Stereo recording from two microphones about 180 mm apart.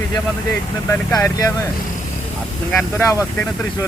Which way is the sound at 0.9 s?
15° left (ahead or behind).